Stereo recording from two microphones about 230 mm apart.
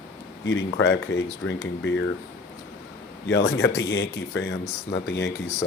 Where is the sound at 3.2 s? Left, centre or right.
Left.